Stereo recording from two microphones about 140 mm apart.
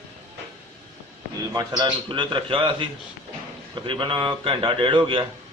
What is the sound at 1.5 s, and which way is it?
A man's voice, 30° right (ahead or behind).